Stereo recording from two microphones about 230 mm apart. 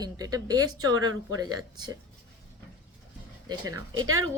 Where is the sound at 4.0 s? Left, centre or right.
Right.